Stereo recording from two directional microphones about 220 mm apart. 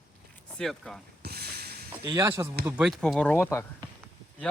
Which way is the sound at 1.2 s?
45° right (ahead or behind).